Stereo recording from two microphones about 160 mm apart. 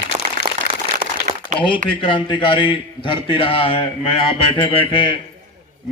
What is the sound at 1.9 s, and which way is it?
A man's voice, 30° left (ahead or behind).